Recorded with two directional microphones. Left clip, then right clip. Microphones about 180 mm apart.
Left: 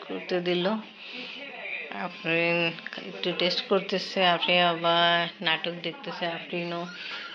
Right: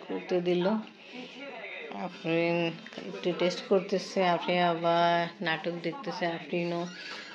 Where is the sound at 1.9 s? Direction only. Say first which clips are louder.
Left 2 dB; 10° right (ahead or behind); by 6.7 s 25° right (ahead or behind).